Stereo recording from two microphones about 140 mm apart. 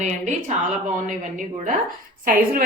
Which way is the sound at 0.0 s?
60° right (ahead or behind).